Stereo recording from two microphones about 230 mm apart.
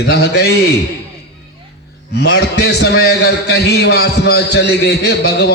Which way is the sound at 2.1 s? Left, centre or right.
Left.